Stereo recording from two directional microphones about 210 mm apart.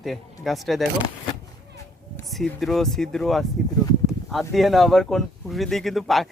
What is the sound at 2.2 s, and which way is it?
Speech, centre (ahead or behind).